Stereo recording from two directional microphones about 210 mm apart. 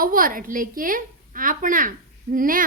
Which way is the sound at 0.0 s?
40° right (ahead or behind).